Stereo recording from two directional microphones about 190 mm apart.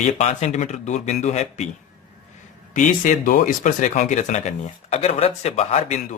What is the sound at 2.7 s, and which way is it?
Speech, 45° left (ahead or behind).